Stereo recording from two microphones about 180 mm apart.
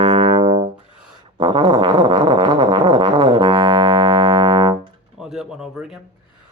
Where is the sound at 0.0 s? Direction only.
25° right (ahead or behind).